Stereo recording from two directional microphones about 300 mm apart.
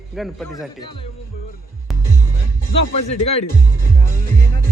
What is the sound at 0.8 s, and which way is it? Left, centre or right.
Speech, centre.